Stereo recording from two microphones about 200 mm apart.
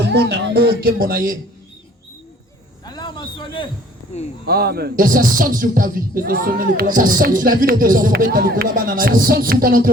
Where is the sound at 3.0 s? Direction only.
25° left (ahead or behind).